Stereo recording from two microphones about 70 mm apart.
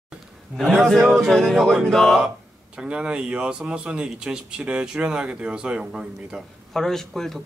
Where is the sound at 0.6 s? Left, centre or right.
Centre.